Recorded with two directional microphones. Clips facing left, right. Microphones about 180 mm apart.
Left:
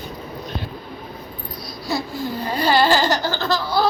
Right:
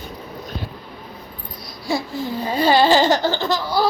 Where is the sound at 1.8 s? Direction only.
25° right (ahead or behind).